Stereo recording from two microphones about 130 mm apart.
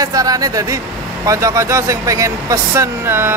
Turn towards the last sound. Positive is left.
turn(degrees=-20)  # may be behind; listen again after turning